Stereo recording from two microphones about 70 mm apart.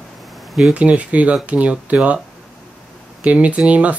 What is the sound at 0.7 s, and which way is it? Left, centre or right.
Speech, centre.